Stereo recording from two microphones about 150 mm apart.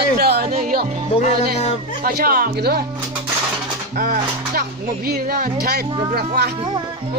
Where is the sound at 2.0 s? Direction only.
80° right.